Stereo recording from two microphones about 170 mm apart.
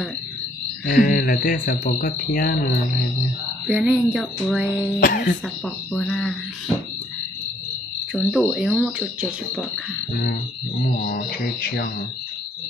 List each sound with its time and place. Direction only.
0.8 s speech: 55° left (ahead or behind)
3.6 s music: 5° right (ahead or behind)
5.0 s speech: 55° left (ahead or behind)
5.9 s music: 5° left (ahead or behind)
8.1 s music: 5° left (ahead or behind)
10.9 s speech: 60° left (ahead or behind)